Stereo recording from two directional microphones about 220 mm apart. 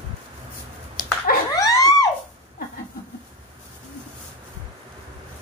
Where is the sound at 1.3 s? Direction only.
40° left (ahead or behind).